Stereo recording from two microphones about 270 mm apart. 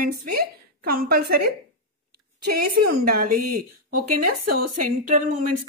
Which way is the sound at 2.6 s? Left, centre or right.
Right.